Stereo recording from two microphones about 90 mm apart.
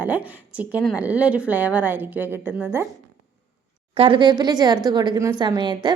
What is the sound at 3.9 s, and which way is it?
Speech, 85° right.